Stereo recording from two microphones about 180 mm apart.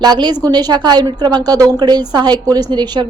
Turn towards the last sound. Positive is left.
turn(degrees=-25)  # may be behind; listen again after turning